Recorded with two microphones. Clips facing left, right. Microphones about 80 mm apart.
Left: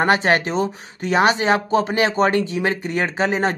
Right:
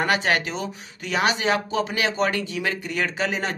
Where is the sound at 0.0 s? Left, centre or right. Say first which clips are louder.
Left 5 dB; left.